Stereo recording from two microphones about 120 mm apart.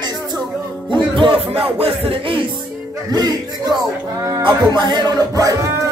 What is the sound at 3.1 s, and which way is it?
Music, 35° right (ahead or behind).